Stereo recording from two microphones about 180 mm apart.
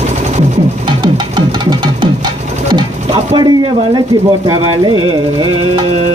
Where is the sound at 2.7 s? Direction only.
25° right (ahead or behind).